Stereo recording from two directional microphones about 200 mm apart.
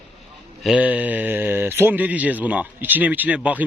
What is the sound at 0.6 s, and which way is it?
A man's voice, 5° right (ahead or behind).